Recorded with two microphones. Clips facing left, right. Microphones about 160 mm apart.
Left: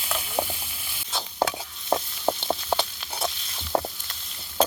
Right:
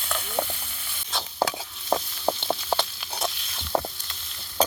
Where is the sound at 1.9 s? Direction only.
5° left (ahead or behind).